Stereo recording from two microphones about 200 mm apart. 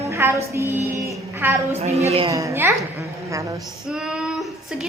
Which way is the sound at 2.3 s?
15° right (ahead or behind).